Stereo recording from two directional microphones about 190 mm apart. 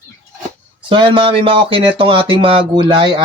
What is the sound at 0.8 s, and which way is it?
Speech, 25° right (ahead or behind).